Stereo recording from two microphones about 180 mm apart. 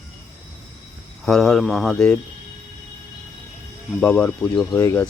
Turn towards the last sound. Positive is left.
turn(degrees=15)  # may be behind; listen again after turning